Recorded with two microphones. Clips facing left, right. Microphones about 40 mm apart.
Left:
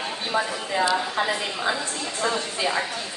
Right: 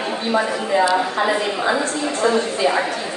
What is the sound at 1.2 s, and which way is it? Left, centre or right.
A woman's voice, right.